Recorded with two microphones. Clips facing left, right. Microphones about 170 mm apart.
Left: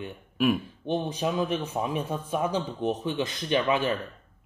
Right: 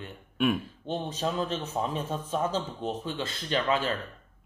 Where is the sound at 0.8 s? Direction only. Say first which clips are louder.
Left 4 dB; 15° left (ahead or behind).